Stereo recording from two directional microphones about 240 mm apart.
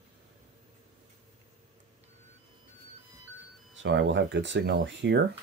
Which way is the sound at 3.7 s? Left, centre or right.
Right.